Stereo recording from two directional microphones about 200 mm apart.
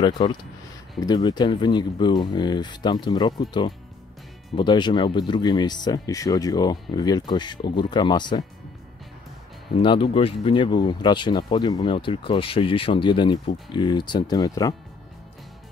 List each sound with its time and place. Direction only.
0.0 s speech: 20° left (ahead or behind)
9.8 s speech: 25° left (ahead or behind)